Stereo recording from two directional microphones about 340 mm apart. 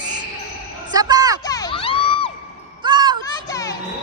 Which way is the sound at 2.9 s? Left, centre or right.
Centre.